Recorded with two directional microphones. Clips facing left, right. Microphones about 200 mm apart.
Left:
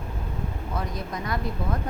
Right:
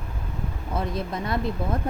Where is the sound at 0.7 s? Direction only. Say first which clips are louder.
Right 5 dB; 25° right (ahead or behind).